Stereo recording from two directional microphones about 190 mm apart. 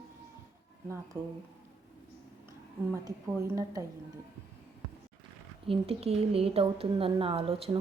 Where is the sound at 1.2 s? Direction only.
20° right (ahead or behind).